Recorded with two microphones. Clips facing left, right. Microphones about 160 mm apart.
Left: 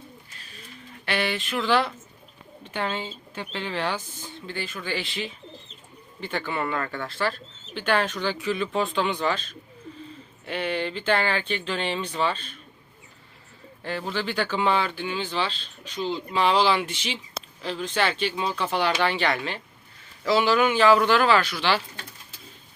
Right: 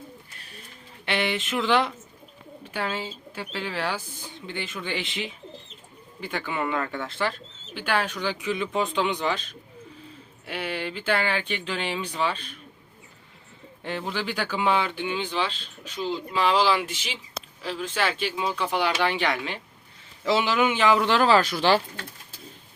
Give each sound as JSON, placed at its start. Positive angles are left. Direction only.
{"t": 1.0, "sound": "speech", "side_deg": -20}
{"t": 2.6, "sound": "speech", "side_deg": -10}
{"t": 13.8, "sound": "speech", "side_deg": -20}